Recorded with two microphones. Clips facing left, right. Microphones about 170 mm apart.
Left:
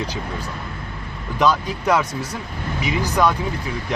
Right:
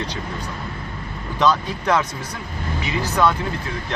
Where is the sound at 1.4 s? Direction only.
10° left (ahead or behind).